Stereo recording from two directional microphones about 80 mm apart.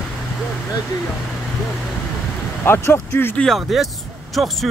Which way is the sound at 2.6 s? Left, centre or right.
Left.